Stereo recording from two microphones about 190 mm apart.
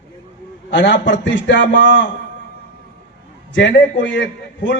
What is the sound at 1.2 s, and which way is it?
Speech, 75° left (ahead or behind).